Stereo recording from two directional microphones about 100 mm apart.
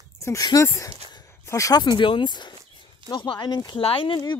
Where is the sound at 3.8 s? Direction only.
65° left (ahead or behind).